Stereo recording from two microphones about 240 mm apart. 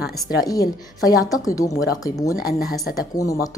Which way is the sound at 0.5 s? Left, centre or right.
Centre.